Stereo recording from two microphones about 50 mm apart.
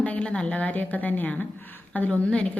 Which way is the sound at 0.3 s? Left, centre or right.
Left.